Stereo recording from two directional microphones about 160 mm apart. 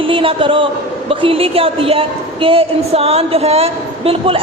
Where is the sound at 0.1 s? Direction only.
35° right (ahead or behind).